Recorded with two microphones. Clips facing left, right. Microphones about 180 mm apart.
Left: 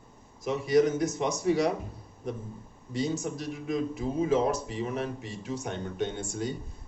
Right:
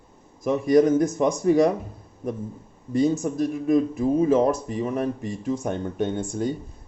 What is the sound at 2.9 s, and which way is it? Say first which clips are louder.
A man's voice: right 9 dB; 50° right (ahead or behind).